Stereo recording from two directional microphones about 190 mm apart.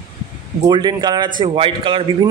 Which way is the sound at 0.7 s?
25° right (ahead or behind).